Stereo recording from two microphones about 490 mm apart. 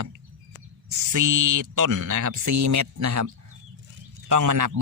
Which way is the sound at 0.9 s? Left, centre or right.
Right.